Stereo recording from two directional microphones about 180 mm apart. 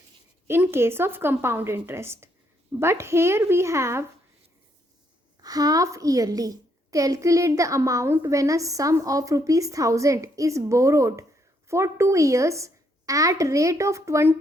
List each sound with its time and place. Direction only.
0.4 s a woman's voice: 15° right (ahead or behind)
5.4 s a woman's voice: 20° right (ahead or behind)